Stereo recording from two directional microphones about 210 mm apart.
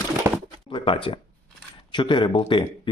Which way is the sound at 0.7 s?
25° left (ahead or behind).